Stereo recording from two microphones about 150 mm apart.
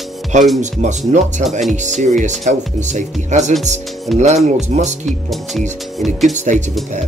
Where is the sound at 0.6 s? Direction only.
50° right (ahead or behind).